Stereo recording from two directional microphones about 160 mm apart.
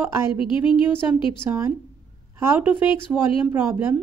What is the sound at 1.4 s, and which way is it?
Speech, 15° right (ahead or behind).